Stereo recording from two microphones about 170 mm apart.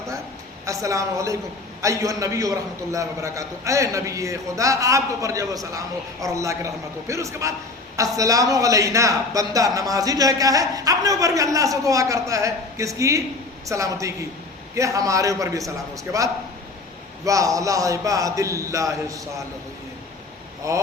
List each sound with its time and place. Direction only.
0.6 s a man's voice: 20° right (ahead or behind)
17.2 s speech: 20° right (ahead or behind)
20.6 s speech: 20° right (ahead or behind)